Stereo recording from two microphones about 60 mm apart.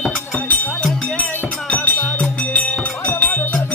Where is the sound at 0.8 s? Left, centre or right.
Centre.